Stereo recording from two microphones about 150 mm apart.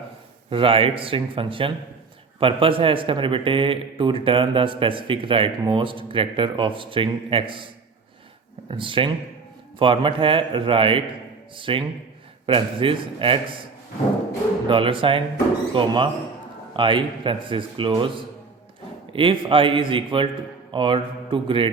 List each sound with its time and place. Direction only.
0.5 s a man's voice: 35° right (ahead or behind)
8.7 s a man's voice: 35° right (ahead or behind)
14.7 s a man's voice: 35° right (ahead or behind)
19.1 s a man's voice: 35° right (ahead or behind)